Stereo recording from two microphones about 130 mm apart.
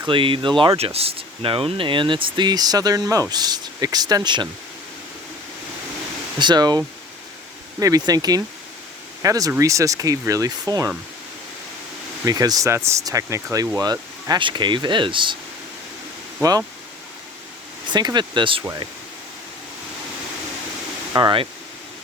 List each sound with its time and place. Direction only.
0.0 s speech: 40° right (ahead or behind)
6.4 s speech: 35° right (ahead or behind)
12.2 s speech: 30° right (ahead or behind)
16.4 s speech: 25° right (ahead or behind)
17.9 s speech: 35° right (ahead or behind)
21.2 s speech: 35° right (ahead or behind)